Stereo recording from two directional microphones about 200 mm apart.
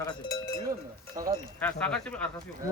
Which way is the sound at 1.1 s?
20° right (ahead or behind).